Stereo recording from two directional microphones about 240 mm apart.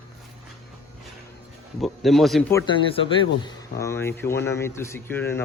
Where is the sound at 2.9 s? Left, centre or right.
Left.